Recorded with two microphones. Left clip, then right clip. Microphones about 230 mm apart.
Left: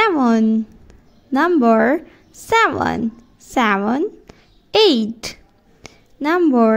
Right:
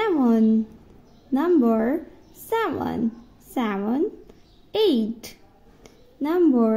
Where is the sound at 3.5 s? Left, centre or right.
Left.